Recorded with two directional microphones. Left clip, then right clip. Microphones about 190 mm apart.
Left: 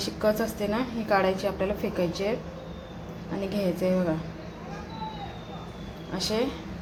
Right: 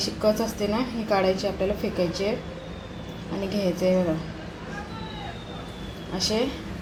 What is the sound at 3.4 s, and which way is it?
Speech, centre (ahead or behind).